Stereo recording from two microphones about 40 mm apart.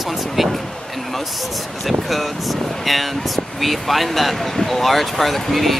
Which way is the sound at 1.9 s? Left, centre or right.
Centre.